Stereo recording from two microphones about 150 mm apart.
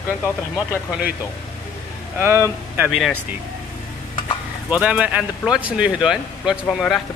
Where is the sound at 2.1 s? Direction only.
15° right (ahead or behind).